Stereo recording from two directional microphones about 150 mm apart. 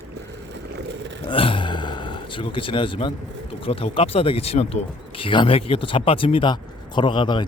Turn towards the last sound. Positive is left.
turn(degrees=30)  # may be behind; listen again after turning